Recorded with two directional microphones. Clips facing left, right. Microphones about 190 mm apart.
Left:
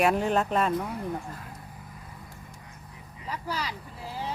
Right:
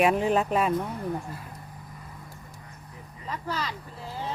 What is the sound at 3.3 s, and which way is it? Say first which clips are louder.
Speech: right 1 dB; 10° left (ahead or behind).